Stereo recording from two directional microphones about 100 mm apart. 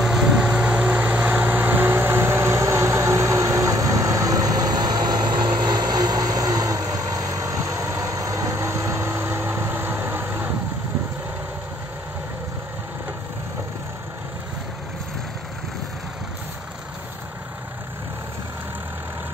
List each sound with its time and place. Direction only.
0.0 s vehicle: 5° right (ahead or behind); by 10.5 s 20° right (ahead or behind)